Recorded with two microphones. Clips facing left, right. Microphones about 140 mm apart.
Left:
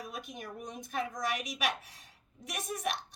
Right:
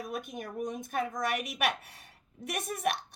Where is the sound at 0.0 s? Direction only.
50° right (ahead or behind).